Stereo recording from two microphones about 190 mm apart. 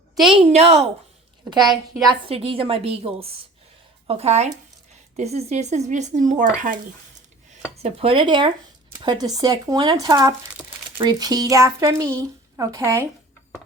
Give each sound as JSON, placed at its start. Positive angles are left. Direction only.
{"t": 0.3, "sound": "speech", "side_deg": -35}
{"t": 1.5, "sound": "speech", "side_deg": -20}
{"t": 7.8, "sound": "speech", "side_deg": -30}
{"t": 10.6, "sound": "crumpling", "side_deg": 0}
{"t": 10.9, "sound": "a woman's voice", "side_deg": -25}